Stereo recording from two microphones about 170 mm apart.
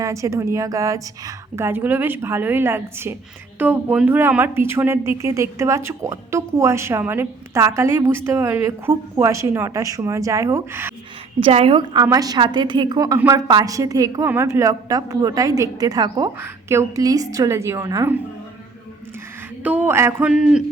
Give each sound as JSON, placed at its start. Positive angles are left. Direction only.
{"t": 0.0, "sound": "speech", "side_deg": -20}
{"t": 11.3, "sound": "a woman's voice", "side_deg": -30}
{"t": 19.6, "sound": "speech", "side_deg": -10}